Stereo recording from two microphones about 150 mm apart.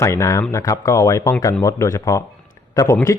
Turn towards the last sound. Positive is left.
turn(degrees=20)  # may be behind; listen again after turning